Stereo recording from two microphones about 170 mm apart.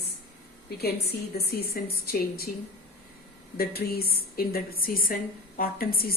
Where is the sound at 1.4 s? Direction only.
65° left (ahead or behind).